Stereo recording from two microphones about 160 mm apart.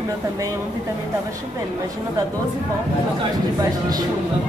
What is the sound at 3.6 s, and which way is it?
Speech, 25° right (ahead or behind).